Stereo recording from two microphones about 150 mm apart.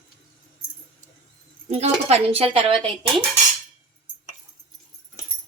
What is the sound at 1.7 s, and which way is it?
Speech, 45° right (ahead or behind).